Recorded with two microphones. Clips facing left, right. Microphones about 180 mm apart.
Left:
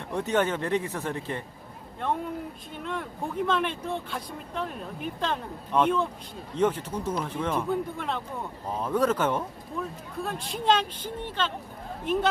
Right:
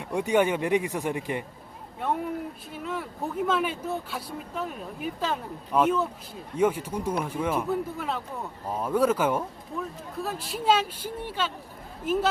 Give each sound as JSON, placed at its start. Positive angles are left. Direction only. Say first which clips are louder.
{"t": 0.0, "sound": "speech", "louder": "right 3 dB", "side_deg": -10}